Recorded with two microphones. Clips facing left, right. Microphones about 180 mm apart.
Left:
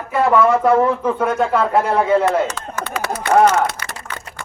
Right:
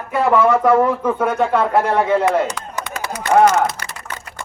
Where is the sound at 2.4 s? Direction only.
15° right (ahead or behind).